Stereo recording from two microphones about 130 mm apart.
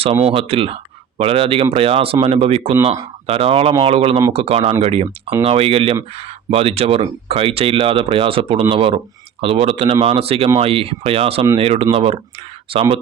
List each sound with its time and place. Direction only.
0.3 s speech: 50° right (ahead or behind)